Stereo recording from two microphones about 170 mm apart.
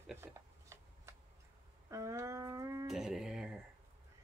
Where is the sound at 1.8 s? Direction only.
20° right (ahead or behind).